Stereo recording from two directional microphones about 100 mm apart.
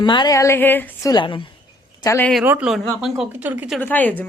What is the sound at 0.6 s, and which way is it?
Speech, 20° left (ahead or behind).